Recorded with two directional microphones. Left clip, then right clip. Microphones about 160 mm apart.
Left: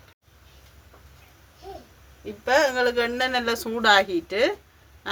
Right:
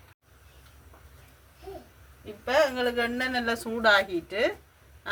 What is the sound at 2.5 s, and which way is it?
Speech, 75° left (ahead or behind).